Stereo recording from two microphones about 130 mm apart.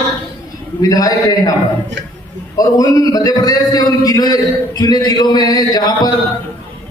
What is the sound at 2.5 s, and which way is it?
A man's voice, 30° left (ahead or behind).